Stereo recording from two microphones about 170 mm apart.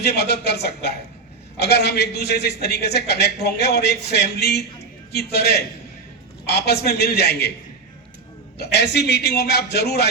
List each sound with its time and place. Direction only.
0.0 s a man's voice: 70° left (ahead or behind)
8.5 s a man's voice: 75° left (ahead or behind)